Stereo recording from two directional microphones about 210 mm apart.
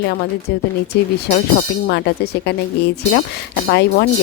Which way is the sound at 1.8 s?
50° left (ahead or behind).